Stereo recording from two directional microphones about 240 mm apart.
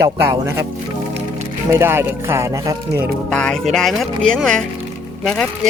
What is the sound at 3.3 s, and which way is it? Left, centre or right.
Speech, centre.